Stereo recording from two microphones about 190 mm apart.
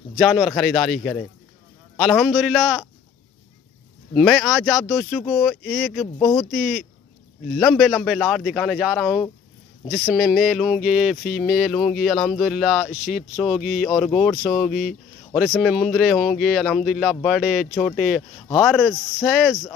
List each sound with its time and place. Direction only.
0.2 s a man's voice: centre (ahead or behind)
4.1 s a man's voice: centre (ahead or behind)
6.1 s speech: 15° left (ahead or behind)
6.5 s a man's voice: centre (ahead or behind)